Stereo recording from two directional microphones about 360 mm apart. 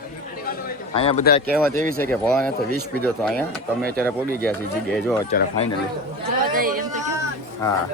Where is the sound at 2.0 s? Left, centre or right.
Centre.